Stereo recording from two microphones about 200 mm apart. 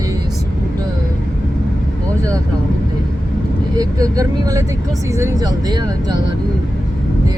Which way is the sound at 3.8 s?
20° right (ahead or behind).